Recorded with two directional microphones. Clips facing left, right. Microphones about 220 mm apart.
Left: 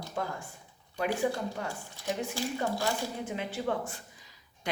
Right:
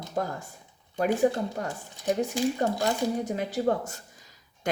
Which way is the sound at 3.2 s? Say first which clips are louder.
Right 6 dB; 40° right (ahead or behind).